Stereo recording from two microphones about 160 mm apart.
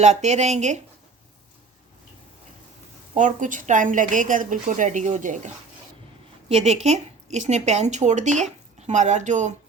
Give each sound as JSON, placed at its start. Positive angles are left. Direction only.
{"t": 0.0, "sound": "speech", "side_deg": -45}
{"t": 3.2, "sound": "speech", "side_deg": -50}
{"t": 6.5, "sound": "speech", "side_deg": -40}